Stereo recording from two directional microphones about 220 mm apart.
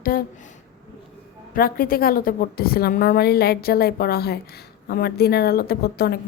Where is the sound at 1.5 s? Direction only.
40° left (ahead or behind).